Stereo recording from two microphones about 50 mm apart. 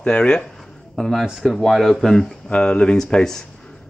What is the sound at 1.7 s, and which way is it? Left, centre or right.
Speech, centre.